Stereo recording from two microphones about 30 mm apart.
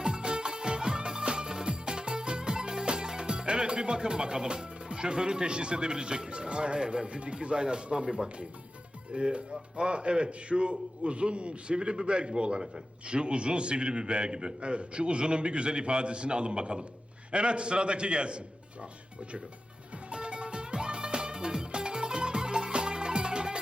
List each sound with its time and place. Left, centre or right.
0.0 s music: right
7.1 s a man's voice: right
20.1 s music: right